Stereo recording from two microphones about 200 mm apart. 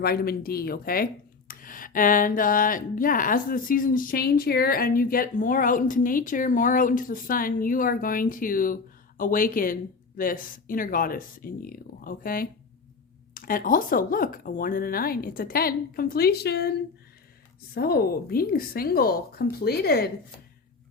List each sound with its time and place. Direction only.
0.0 s speech: 50° left (ahead or behind)
17.7 s speech: 50° left (ahead or behind)